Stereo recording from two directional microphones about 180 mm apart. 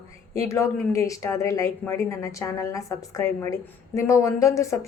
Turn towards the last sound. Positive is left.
turn(degrees=15)  # may be behind; listen again after turning